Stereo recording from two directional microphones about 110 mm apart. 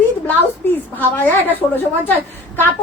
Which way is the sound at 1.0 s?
15° left (ahead or behind).